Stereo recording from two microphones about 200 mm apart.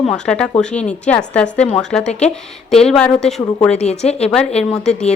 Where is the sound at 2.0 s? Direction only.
35° left (ahead or behind).